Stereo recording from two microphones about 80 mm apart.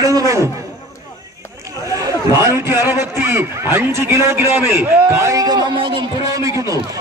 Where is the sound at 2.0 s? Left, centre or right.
Right.